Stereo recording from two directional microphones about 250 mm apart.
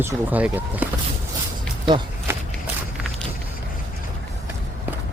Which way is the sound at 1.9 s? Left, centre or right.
Centre.